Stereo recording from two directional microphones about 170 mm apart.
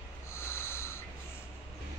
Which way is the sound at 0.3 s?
15° left (ahead or behind).